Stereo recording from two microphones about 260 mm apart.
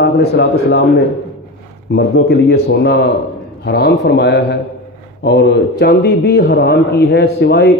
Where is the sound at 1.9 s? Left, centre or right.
Left.